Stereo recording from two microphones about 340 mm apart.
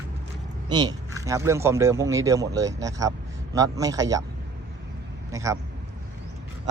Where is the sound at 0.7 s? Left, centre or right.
Centre.